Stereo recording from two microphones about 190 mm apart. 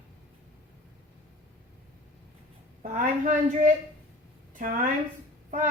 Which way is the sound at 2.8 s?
40° right (ahead or behind).